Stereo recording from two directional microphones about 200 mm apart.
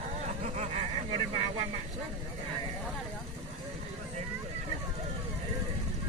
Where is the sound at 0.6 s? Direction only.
35° right (ahead or behind).